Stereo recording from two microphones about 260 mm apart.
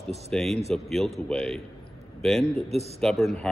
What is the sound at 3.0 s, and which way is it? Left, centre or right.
Speech, centre.